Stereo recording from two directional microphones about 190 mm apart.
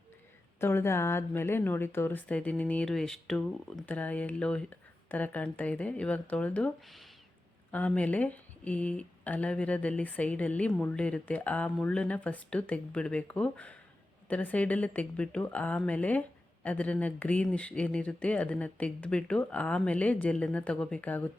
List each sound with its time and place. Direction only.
0.6 s speech: 10° left (ahead or behind)